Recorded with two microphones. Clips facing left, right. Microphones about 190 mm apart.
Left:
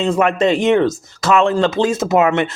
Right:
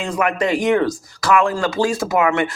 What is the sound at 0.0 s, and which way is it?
Speech, 25° left (ahead or behind).